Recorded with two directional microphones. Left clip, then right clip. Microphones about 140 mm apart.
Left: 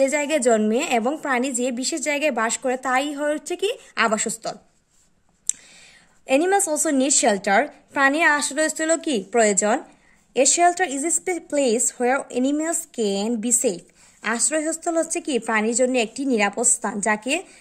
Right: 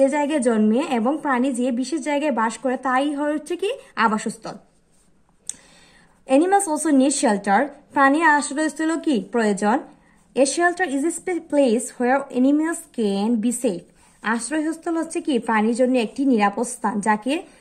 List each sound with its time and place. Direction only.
0.0 s a woman's voice: 30° left (ahead or behind)
6.2 s a woman's voice: 25° left (ahead or behind)